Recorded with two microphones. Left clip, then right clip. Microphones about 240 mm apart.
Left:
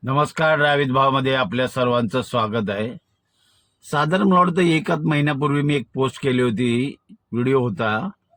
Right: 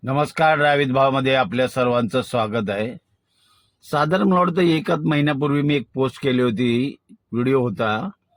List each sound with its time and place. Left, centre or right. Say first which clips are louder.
0.0 s a man's voice: right 1 dB; left
3.9 s a man's voice: left 1 dB; left